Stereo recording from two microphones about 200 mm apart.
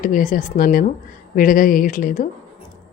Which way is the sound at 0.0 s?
40° left (ahead or behind).